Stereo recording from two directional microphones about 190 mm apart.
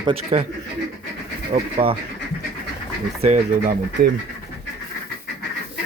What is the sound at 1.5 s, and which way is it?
Speech, 30° right (ahead or behind).